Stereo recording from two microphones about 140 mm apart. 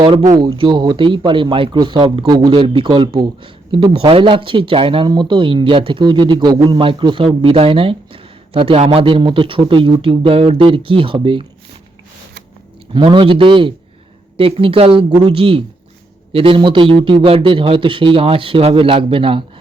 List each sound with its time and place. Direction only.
0.0 s speech: 35° right (ahead or behind)
12.9 s speech: 35° right (ahead or behind)